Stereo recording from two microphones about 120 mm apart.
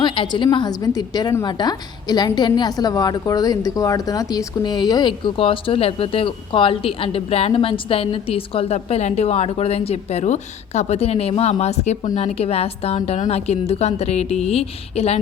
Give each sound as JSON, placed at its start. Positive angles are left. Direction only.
{"t": 0.0, "sound": "a woman's voice", "side_deg": 40}